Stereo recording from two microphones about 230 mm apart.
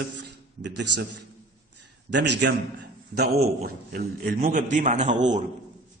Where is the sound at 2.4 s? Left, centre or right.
Right.